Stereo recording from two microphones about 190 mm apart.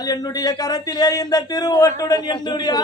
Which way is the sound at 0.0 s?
20° left (ahead or behind).